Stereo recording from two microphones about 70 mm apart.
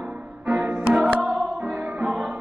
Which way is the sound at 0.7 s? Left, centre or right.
Right.